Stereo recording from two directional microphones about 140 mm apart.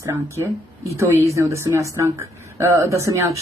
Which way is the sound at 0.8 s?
20° right (ahead or behind).